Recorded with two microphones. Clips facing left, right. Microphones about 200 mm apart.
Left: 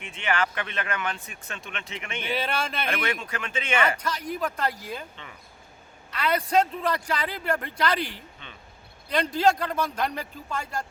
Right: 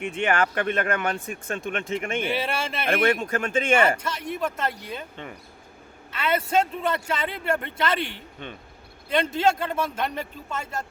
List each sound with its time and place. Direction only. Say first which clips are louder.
0.0 s speech: right 4 dB; 45° right (ahead or behind)
2.3 s speech: right 1 dB; 5° right (ahead or behind)
2.8 s speech: right 7 dB; 50° right (ahead or behind)
3.8 s a man's voice: right 3 dB; 25° right (ahead or behind)
4.2 s speech: right 1 dB; 5° right (ahead or behind)
6.1 s a woman's voice: right 1 dB; 5° right (ahead or behind)
9.4 s speech: left 3 dB; 5° right (ahead or behind)
9.7 s a man's voice: right 1 dB; 25° right (ahead or behind)
10.0 s speech: even; centre (ahead or behind)